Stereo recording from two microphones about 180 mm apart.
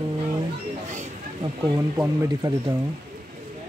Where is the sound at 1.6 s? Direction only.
20° right (ahead or behind).